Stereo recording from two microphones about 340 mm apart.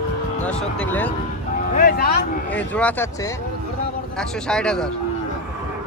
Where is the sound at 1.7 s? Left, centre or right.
Left.